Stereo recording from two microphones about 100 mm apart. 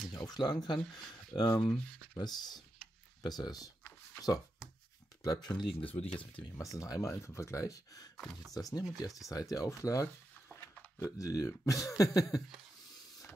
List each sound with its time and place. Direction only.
0.1 s speech: 45° left (ahead or behind)
5.2 s speech: 40° left (ahead or behind)
5.6 s speech: 65° left (ahead or behind)
6.5 s speech: 35° left (ahead or behind)
10.5 s a sound: 20° left (ahead or behind)
11.1 s speech: 35° left (ahead or behind)